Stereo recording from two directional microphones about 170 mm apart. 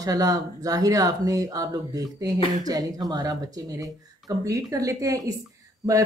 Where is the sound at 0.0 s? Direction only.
20° right (ahead or behind).